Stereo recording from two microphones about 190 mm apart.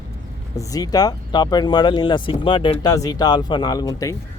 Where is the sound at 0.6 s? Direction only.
20° left (ahead or behind).